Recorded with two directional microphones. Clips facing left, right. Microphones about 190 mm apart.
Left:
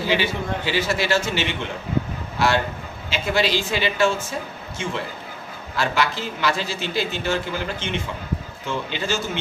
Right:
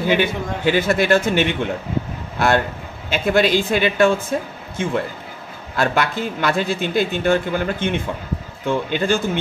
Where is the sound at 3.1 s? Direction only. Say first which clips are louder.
Right 5 dB; 55° right (ahead or behind).